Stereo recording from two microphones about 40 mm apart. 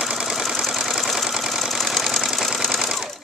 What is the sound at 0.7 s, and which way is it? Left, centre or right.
Engine, centre.